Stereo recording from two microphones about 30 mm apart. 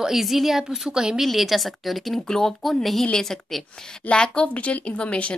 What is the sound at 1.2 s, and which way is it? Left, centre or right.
Speech, centre.